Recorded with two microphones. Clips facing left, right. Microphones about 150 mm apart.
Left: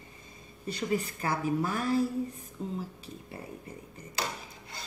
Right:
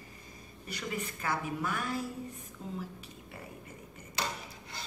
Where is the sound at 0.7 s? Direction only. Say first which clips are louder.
Left 7 dB; 30° left (ahead or behind).